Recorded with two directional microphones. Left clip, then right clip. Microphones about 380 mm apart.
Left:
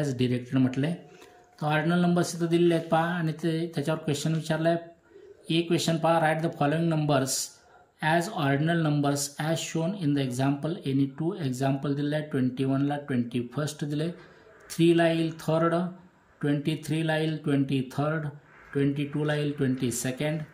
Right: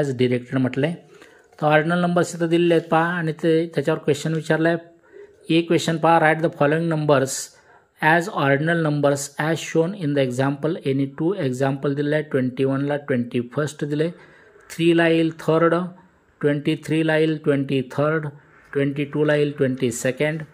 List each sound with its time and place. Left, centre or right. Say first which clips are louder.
0.0 s speech: right 8 dB; centre